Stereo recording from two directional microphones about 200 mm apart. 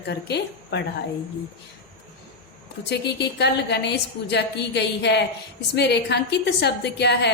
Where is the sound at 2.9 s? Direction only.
55° left (ahead or behind).